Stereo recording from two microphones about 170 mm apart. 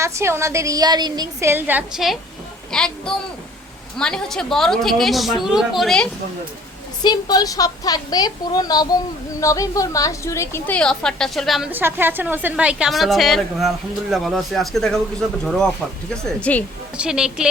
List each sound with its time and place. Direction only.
0.0 s a woman's voice: 15° right (ahead or behind); by 6.1 s centre (ahead or behind)
7.0 s a woman's voice: 25° left (ahead or behind); by 11.7 s centre (ahead or behind)
11.7 s a woman's voice: 10° right (ahead or behind); by 16.6 s 10° left (ahead or behind)
17.0 s a woman's voice: 5° right (ahead or behind)